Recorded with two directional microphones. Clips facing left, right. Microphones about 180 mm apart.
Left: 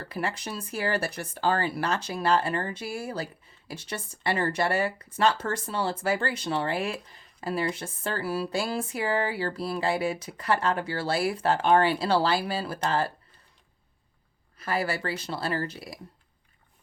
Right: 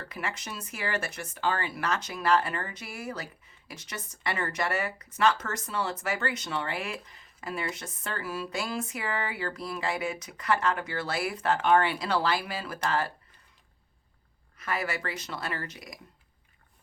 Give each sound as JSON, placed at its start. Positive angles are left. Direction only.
{"t": 0.0, "sound": "speech", "side_deg": 30}
{"t": 14.6, "sound": "speech", "side_deg": 30}